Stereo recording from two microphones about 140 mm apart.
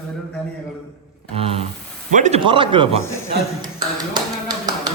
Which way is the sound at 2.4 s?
35° right (ahead or behind).